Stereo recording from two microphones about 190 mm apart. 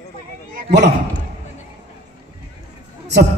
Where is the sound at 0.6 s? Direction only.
60° right (ahead or behind).